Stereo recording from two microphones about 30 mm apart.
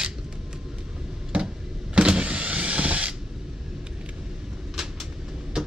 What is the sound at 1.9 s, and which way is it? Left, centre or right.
Power windows, right.